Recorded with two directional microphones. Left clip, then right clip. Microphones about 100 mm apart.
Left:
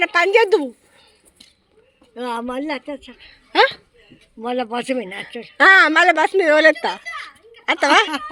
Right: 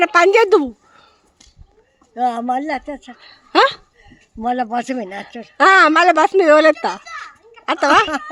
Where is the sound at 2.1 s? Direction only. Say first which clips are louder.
Right 7 dB; 45° right (ahead or behind).